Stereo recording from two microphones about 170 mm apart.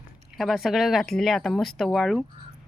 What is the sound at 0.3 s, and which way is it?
Speech, centre (ahead or behind).